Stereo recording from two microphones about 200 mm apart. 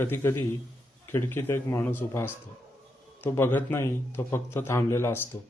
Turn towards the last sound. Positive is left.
turn(degrees=15)  # may be behind; listen again after turning